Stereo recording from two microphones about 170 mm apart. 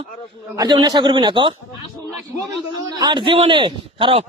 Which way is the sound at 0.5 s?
25° right (ahead or behind).